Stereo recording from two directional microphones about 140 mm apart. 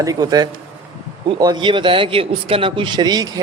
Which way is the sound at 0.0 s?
25° right (ahead or behind).